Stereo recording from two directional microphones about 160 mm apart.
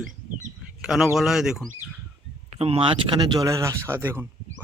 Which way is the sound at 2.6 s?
35° right (ahead or behind).